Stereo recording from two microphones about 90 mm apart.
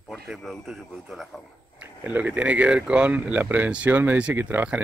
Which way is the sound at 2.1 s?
15° right (ahead or behind).